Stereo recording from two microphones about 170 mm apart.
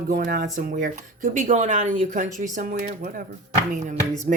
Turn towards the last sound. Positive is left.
turn(degrees=-50)  # may be behind; listen again after turning